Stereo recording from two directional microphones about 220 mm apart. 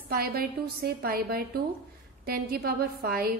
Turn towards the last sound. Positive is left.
turn(degrees=-45)  # may be behind; listen again after turning